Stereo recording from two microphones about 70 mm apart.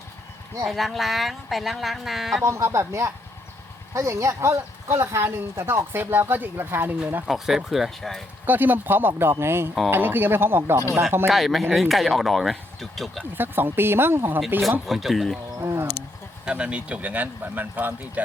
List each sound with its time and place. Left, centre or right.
0.6 s speech: centre
2.4 s speech: right
7.3 s speech: centre
8.4 s speech: right
11.3 s speech: centre
13.3 s speech: right
14.8 s speech: centre
15.6 s wild animals: right
16.5 s speech: centre